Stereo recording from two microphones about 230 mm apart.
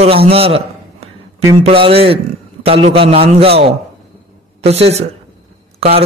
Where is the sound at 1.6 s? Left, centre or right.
Right.